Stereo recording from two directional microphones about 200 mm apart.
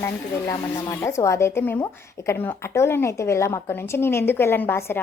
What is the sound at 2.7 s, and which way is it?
A woman's voice, 15° left (ahead or behind).